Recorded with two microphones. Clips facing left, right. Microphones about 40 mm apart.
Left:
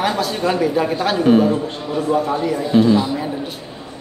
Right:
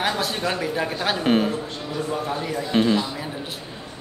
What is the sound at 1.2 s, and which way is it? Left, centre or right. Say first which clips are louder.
Speech: left 7 dB; right.